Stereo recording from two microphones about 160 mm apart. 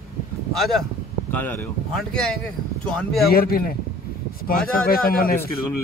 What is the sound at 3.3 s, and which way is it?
A man's voice, 70° left (ahead or behind).